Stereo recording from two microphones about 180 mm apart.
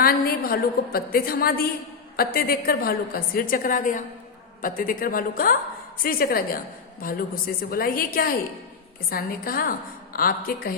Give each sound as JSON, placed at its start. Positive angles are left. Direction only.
{"t": 0.0, "sound": "a woman's voice", "side_deg": 55}